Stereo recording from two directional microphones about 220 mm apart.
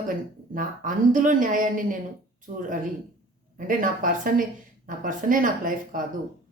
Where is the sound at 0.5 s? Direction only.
35° right (ahead or behind).